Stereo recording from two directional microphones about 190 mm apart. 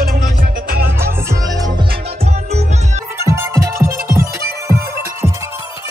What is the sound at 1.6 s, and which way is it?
Music, 25° right (ahead or behind).